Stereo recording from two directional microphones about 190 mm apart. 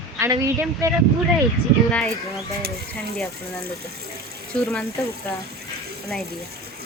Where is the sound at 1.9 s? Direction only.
5° left (ahead or behind).